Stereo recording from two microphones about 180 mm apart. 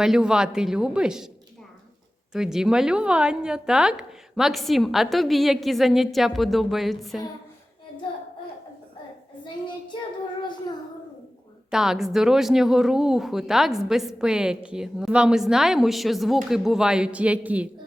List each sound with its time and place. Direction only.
0.0 s speech: 5° right (ahead or behind)
2.3 s speech: 5° right (ahead or behind)
9.4 s child singing: 25° left (ahead or behind)
11.7 s speech: centre (ahead or behind)